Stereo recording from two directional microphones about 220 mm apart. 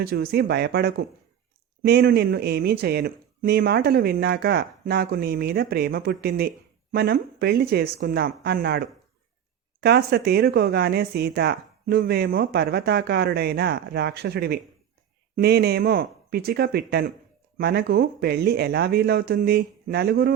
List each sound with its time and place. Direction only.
0.0 s speech: 45° right (ahead or behind)